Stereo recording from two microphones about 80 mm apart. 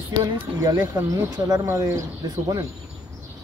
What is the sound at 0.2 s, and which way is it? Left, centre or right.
Speech, right.